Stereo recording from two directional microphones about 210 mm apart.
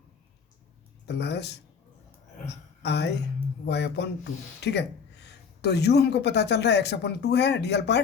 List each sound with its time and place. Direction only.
1.0 s speech: 55° left (ahead or behind)
2.8 s speech: 55° left (ahead or behind)